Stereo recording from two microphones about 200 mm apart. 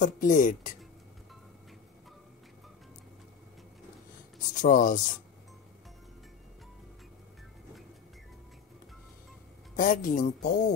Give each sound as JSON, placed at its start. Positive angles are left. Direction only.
{"t": 0.0, "sound": "speech", "side_deg": 40}
{"t": 4.6, "sound": "speech", "side_deg": 40}
{"t": 9.8, "sound": "speech", "side_deg": 40}